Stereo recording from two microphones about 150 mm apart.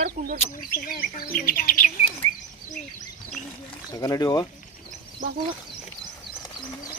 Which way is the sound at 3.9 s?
25° left (ahead or behind).